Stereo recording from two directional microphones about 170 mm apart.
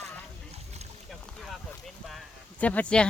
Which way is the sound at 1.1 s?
Centre (ahead or behind).